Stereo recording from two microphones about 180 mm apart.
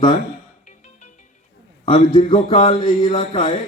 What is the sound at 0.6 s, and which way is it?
Music, 40° left (ahead or behind).